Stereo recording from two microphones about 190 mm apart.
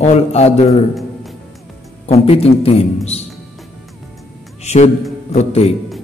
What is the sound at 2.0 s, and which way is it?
A man's voice, 35° left (ahead or behind).